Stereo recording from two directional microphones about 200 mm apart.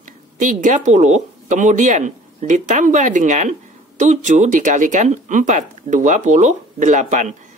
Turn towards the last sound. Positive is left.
turn(degrees=-40)  # may be behind; listen again after turning